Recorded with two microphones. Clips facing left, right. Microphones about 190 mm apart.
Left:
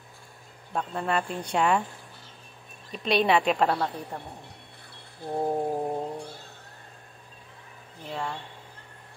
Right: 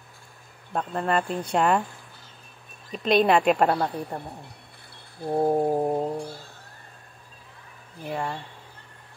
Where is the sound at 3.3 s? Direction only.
Centre (ahead or behind).